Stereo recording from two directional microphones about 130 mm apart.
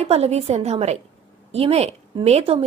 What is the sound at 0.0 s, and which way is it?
A woman's voice, 50° right (ahead or behind).